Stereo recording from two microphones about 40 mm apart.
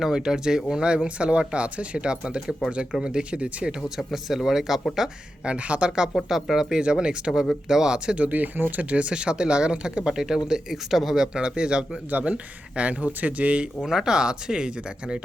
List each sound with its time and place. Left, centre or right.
0.0 s speech: centre
3.8 s speech: centre
4.9 s speech: right
6.2 s speech: centre
6.7 s speech: right
8.2 s speech: right
8.8 s speech: right; by 11.2 s centre
11.2 s speech: centre
12.1 s speech: right
13.8 s speech: centre